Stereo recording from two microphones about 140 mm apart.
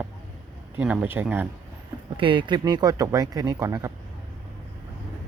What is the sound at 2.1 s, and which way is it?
Speech, 35° right (ahead or behind).